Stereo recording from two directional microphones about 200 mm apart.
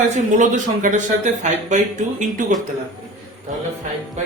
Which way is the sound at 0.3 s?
40° right (ahead or behind).